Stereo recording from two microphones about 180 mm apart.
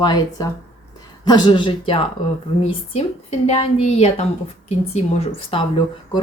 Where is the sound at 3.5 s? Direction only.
35° left (ahead or behind).